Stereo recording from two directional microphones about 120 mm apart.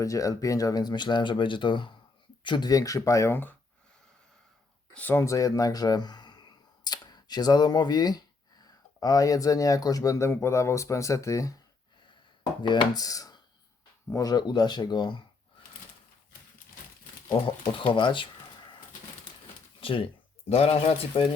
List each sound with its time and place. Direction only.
0.0 s speech: 25° left (ahead or behind)
4.9 s speech: 20° left (ahead or behind); by 15.2 s 40° left (ahead or behind)
17.4 s speech: 45° left (ahead or behind)
17.9 s a sound: 45° left (ahead or behind)
19.8 s speech: 50° left (ahead or behind)
20.5 s speech: 60° left (ahead or behind)